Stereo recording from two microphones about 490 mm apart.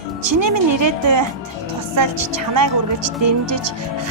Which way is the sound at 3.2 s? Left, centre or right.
Right.